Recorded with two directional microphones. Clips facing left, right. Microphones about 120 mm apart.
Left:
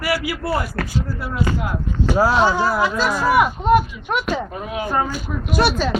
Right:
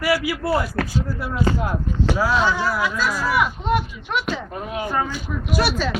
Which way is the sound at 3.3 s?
45° left (ahead or behind).